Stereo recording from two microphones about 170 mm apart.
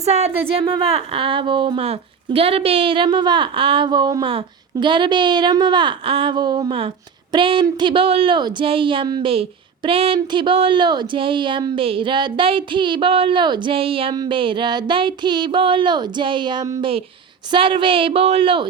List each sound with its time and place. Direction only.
0.0 s a woman's voice: 40° right (ahead or behind)